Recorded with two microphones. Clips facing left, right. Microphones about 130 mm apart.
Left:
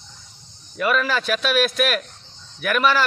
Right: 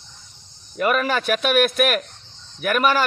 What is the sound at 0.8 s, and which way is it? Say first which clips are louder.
A man's voice: right 1 dB; 50° right (ahead or behind).